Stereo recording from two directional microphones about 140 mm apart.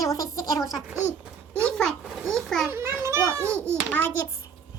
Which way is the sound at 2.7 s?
20° right (ahead or behind).